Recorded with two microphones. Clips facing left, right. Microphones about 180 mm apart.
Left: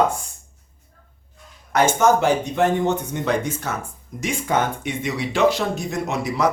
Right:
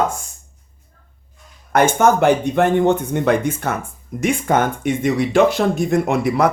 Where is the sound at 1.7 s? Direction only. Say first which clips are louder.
Right 3 dB; 55° right (ahead or behind).